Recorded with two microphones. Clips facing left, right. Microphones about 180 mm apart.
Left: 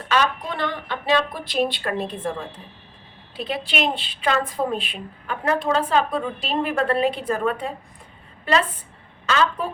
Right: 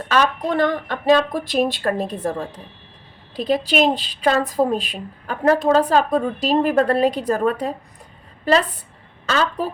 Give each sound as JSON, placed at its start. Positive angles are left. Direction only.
{"t": 0.1, "sound": "a woman's voice", "side_deg": -45}